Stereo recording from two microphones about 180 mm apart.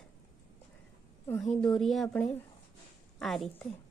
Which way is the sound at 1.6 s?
Centre (ahead or behind).